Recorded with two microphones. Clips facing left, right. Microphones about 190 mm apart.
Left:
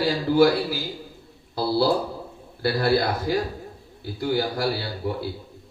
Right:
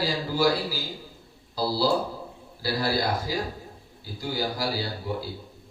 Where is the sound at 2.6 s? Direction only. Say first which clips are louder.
Left 5 dB; 60° left (ahead or behind).